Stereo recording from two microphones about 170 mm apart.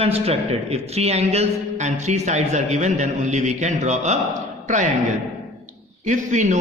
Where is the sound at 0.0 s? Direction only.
35° right (ahead or behind).